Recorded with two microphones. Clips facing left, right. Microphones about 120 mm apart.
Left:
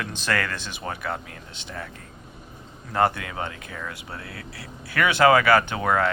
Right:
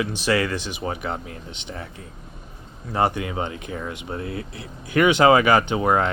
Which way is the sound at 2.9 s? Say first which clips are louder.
Right 1 dB; 20° right (ahead or behind).